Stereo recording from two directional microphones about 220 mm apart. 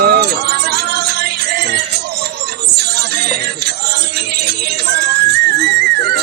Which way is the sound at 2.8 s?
45° right (ahead or behind).